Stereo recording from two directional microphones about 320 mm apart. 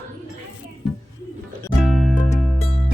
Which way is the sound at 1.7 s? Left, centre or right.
Centre.